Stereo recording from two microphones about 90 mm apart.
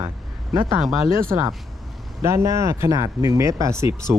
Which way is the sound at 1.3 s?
45° right (ahead or behind).